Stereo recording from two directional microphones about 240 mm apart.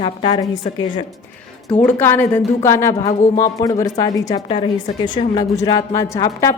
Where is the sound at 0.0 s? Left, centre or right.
Left.